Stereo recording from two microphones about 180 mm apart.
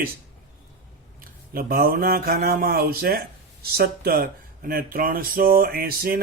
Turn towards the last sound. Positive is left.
turn(degrees=-55)  # may be behind; listen again after turning